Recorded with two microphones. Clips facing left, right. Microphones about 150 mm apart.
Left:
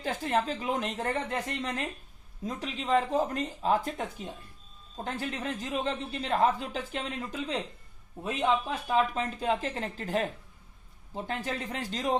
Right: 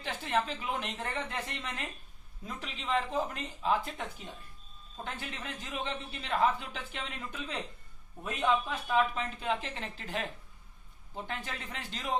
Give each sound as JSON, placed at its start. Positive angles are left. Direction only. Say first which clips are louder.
{"t": 0.0, "sound": "speech", "louder": "left 3 dB", "side_deg": 40}